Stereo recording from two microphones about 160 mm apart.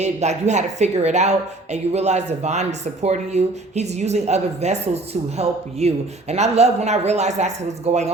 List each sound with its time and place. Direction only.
0.0 s a woman's voice: 45° right (ahead or behind)